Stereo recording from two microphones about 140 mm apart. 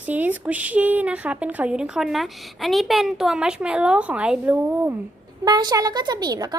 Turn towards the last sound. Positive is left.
turn(degrees=-25)  # may be behind; listen again after turning